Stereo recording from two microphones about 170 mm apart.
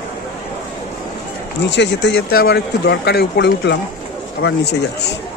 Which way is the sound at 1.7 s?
90° left.